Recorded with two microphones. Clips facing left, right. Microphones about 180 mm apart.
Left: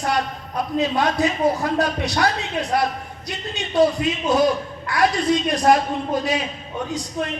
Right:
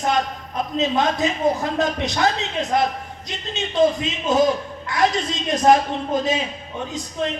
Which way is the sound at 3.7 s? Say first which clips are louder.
Left 1 dB; 20° right (ahead or behind).